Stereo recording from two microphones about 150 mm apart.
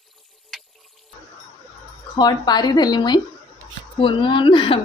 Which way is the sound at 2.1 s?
30° left (ahead or behind).